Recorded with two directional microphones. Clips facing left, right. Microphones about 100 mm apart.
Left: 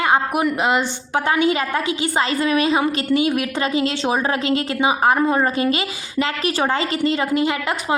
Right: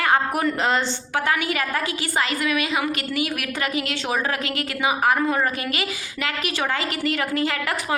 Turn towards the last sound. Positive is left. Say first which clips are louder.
# left 4 dB
turn(degrees=20)  # may be behind; listen again after turning